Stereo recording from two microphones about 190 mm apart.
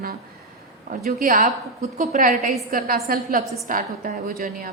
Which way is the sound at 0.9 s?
50° right (ahead or behind).